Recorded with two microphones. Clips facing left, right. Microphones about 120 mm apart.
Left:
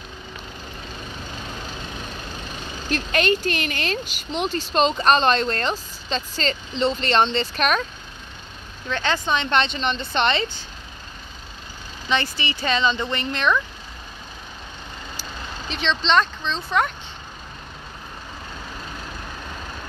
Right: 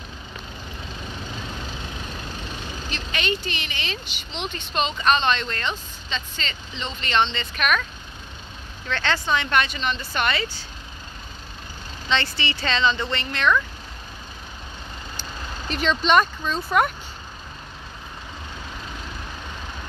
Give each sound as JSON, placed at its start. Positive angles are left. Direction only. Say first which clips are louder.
{"t": 2.9, "sound": "a woman's voice", "louder": "left 7 dB", "side_deg": 45}
{"t": 8.8, "sound": "speech", "louder": "left 1 dB", "side_deg": 15}
{"t": 12.1, "sound": "speech", "louder": "left 1 dB", "side_deg": 15}
{"t": 15.7, "sound": "speech", "louder": "right 1 dB", "side_deg": -5}